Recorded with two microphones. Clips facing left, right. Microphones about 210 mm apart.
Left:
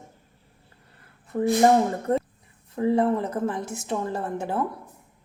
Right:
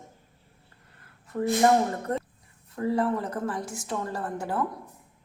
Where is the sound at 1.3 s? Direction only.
25° left (ahead or behind).